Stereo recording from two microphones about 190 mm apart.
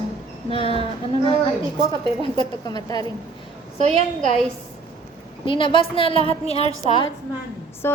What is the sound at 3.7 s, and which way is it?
Speech, 35° right (ahead or behind).